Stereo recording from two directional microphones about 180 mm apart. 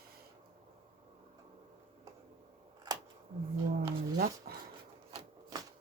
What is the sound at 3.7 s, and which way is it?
Speech, 55° right (ahead or behind).